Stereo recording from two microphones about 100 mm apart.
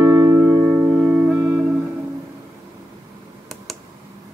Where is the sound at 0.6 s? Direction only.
Centre (ahead or behind).